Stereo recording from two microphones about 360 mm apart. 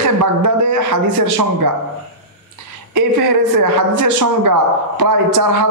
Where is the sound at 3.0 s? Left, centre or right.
Right.